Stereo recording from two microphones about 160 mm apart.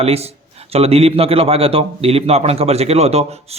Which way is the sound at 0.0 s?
40° right (ahead or behind).